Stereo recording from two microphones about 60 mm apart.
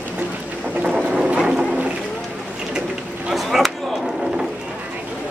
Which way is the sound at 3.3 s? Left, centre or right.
Centre.